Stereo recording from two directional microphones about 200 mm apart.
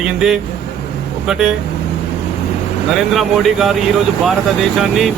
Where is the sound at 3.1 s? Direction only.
Centre (ahead or behind).